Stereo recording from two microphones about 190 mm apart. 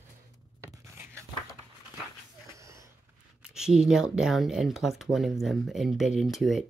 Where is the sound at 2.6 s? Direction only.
15° right (ahead or behind).